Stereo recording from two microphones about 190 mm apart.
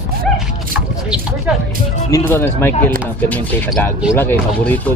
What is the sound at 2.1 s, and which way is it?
Speech, 10° left (ahead or behind).